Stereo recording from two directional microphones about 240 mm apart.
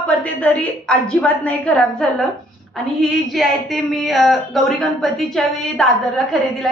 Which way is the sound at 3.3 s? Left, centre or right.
Centre.